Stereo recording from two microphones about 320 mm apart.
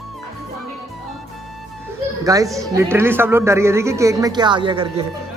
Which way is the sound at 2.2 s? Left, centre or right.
Centre.